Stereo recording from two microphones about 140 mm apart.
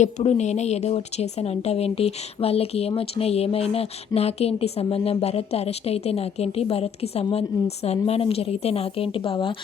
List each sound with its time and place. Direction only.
0.0 s a woman's voice: 55° left (ahead or behind)